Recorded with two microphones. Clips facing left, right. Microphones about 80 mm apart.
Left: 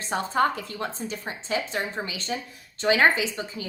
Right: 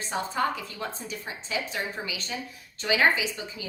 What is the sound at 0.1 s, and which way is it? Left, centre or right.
A woman's voice, left.